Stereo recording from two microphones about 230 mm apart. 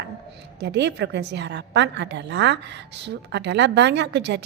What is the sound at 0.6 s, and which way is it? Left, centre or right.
A woman's voice, right.